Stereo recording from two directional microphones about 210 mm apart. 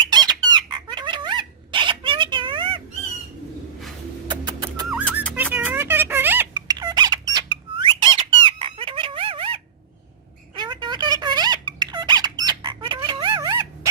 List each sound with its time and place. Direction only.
0.1 s a sound: 20° right (ahead or behind)
4.3 s music: 20° right (ahead or behind)
5.3 s music: 10° right (ahead or behind)
7.3 s squeak: 20° right (ahead or behind)